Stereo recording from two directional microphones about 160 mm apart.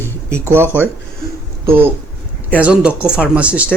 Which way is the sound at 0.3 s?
15° right (ahead or behind).